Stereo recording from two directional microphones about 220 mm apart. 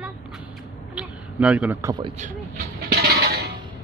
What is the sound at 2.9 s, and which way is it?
Music, 45° right (ahead or behind).